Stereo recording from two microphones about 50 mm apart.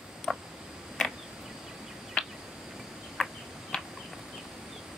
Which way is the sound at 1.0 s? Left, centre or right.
Centre.